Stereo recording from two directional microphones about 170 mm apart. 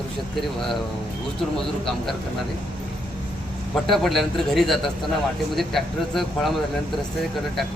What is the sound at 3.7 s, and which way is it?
A man's voice, centre (ahead or behind).